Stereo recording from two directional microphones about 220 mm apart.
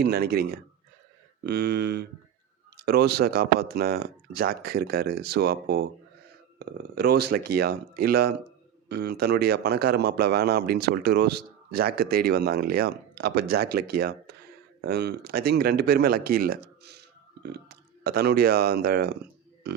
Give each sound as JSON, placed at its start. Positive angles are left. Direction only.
{"t": 0.0, "sound": "a man's voice", "side_deg": -45}
{"t": 18.0, "sound": "a man's voice", "side_deg": -45}